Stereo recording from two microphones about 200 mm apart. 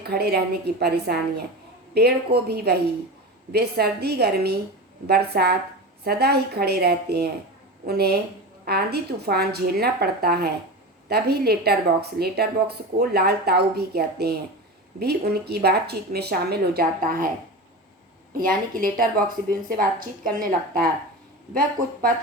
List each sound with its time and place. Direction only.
0.0 s a woman's voice: 50° right (ahead or behind)
18.3 s a woman's voice: 45° right (ahead or behind)